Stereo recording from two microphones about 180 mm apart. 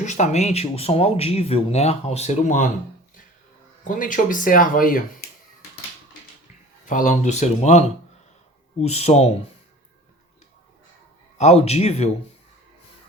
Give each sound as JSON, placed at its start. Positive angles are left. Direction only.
{"t": 0.0, "sound": "speech", "side_deg": 40}
{"t": 3.8, "sound": "speech", "side_deg": 50}
{"t": 6.8, "sound": "speech", "side_deg": 45}
{"t": 11.3, "sound": "speech", "side_deg": 35}